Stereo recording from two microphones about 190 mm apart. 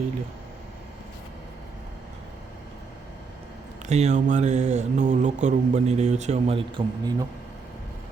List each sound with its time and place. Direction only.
3.8 s mantra: 35° right (ahead or behind)